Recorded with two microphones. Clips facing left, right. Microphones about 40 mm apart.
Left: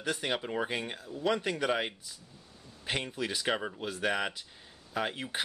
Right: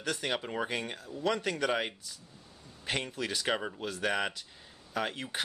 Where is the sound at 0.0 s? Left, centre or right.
Centre.